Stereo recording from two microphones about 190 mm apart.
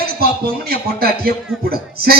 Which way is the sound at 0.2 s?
55° right (ahead or behind).